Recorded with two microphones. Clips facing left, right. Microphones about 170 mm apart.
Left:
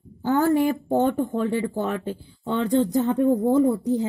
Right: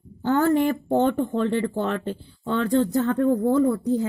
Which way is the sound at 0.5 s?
5° left (ahead or behind).